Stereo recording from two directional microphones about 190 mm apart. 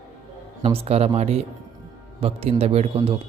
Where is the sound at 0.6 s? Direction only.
30° right (ahead or behind).